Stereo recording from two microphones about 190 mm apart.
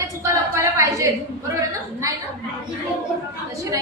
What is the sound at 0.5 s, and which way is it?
Speech, 15° right (ahead or behind).